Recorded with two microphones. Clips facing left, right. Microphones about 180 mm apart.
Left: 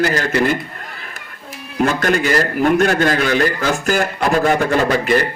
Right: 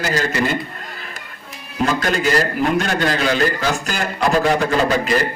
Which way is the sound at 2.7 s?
50° left (ahead or behind).